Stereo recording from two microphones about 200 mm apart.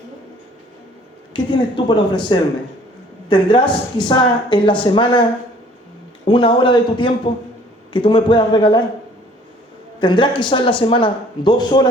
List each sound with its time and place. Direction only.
1.3 s a woman's voice: 25° left (ahead or behind)
6.2 s a woman's voice: 25° left (ahead or behind)
10.0 s a woman's voice: 25° left (ahead or behind)